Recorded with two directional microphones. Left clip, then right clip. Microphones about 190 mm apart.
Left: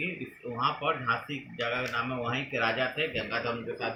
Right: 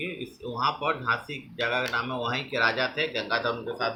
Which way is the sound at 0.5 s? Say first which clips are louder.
Right 2 dB; 15° right (ahead or behind).